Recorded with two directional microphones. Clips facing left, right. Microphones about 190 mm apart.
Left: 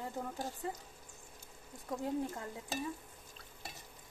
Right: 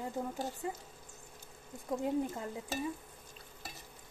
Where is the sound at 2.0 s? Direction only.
20° right (ahead or behind).